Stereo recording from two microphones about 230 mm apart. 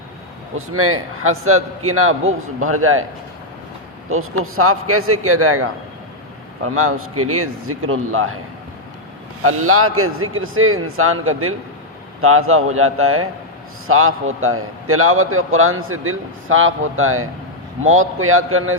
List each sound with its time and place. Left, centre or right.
0.5 s a man's voice: right
4.1 s a man's voice: right
9.4 s a man's voice: right